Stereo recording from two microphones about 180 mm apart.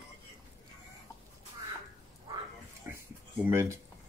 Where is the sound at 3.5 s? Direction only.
15° right (ahead or behind).